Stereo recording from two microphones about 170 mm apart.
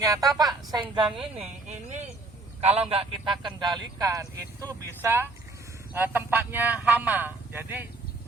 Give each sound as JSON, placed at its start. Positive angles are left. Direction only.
{"t": 0.0, "sound": "speech", "side_deg": -20}
{"t": 2.6, "sound": "a man's voice", "side_deg": -40}